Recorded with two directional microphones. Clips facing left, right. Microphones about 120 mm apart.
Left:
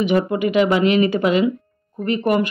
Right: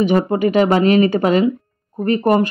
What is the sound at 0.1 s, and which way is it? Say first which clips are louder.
Speech: right 2 dB; 40° right (ahead or behind).